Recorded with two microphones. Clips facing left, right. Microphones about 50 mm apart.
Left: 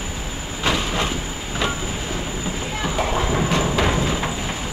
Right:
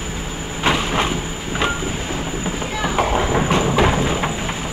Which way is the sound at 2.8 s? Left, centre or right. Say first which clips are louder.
Right 4 dB; right.